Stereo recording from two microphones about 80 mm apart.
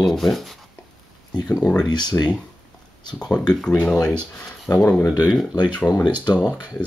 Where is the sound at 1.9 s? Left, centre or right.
Left.